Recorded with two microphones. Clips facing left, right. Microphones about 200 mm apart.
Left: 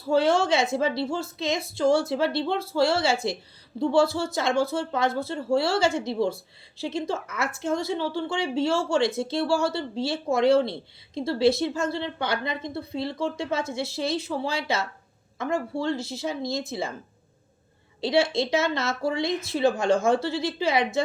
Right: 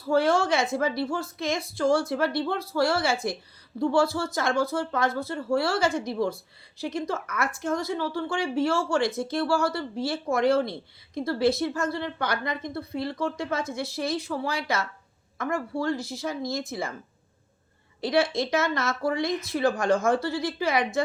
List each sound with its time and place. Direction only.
0.0 s a woman's voice: 25° left (ahead or behind)
18.0 s a woman's voice: 25° left (ahead or behind)